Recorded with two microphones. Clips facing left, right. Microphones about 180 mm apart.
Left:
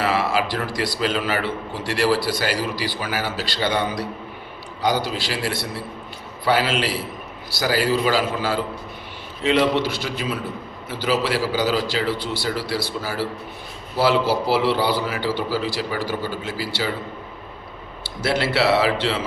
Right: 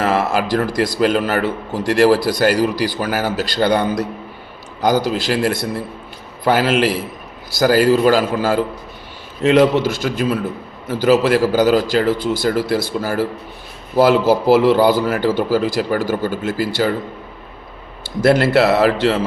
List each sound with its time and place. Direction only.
0.0 s speech: 45° right (ahead or behind)
18.2 s speech: 50° right (ahead or behind)